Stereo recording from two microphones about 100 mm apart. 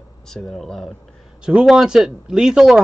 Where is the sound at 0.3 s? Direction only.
5° left (ahead or behind).